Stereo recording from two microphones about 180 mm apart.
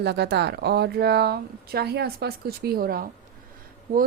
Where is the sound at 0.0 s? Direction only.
65° right (ahead or behind).